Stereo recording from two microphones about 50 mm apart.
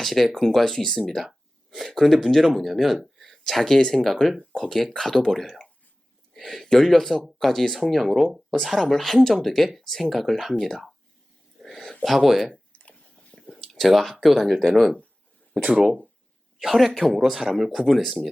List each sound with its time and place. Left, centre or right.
0.0 s speech: centre
11.6 s a sound: centre
12.0 s speech: centre
12.7 s chewing: left
13.3 s speech: centre
16.6 s speech: centre